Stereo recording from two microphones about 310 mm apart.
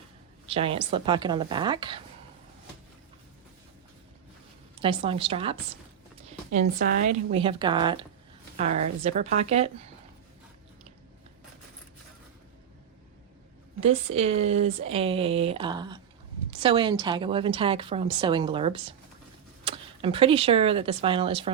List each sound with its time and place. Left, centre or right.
0.4 s a woman's voice: centre
4.8 s a woman's voice: centre
13.8 s a woman's voice: centre